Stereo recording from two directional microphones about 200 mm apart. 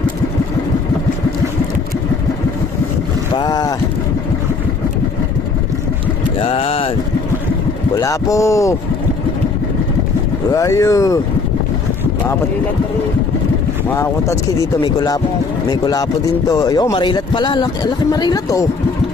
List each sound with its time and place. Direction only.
3.3 s boat: 20° left (ahead or behind)
6.4 s a sound: 30° left (ahead or behind)
7.9 s speech: 15° left (ahead or behind)
10.5 s speech: 15° left (ahead or behind)
13.9 s speech: 15° left (ahead or behind)